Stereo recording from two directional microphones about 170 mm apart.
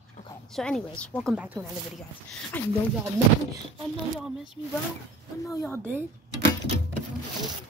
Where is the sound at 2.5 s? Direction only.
10° left (ahead or behind).